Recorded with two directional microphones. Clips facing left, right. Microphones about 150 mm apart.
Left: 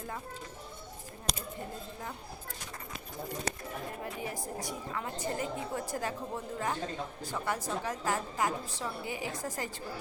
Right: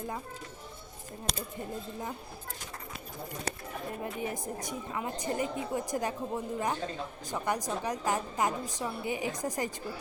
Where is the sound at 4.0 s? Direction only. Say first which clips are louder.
Right 3 dB; 20° right (ahead or behind).